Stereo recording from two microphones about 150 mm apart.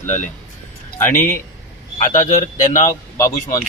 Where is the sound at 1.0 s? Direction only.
15° left (ahead or behind).